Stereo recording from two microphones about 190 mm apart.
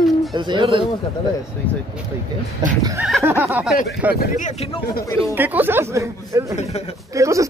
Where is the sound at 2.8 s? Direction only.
20° right (ahead or behind).